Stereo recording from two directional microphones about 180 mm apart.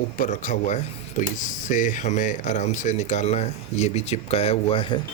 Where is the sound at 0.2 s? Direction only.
45° left (ahead or behind).